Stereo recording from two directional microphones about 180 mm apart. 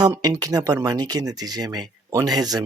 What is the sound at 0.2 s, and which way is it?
Speech, 20° right (ahead or behind).